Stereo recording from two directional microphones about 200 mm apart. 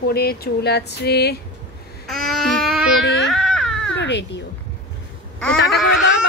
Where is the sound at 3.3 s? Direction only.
5° left (ahead or behind).